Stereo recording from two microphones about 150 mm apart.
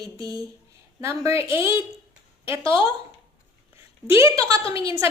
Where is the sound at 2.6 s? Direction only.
35° left (ahead or behind).